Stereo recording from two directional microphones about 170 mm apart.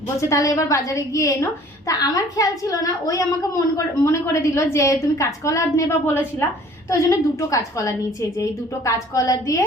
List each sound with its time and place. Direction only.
0.2 s a woman's voice: 20° left (ahead or behind)